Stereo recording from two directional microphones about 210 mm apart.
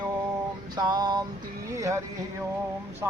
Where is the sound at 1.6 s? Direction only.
15° right (ahead or behind).